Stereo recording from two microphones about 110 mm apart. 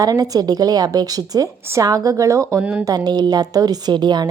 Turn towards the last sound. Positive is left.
turn(degrees=-40)  # may be behind; listen again after turning